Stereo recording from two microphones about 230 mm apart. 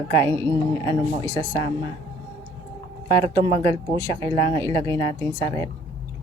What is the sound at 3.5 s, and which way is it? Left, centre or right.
Speech, right.